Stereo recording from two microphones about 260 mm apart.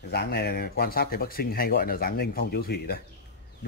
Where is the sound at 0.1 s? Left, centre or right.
Left.